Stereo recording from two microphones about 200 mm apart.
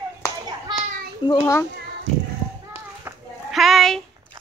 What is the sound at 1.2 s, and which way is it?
Speech, 20° left (ahead or behind).